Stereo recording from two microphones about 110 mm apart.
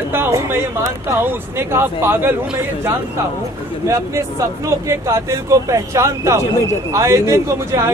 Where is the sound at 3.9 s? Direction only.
25° right (ahead or behind).